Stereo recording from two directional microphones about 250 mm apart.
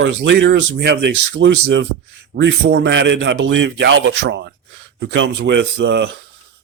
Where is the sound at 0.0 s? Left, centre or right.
Right.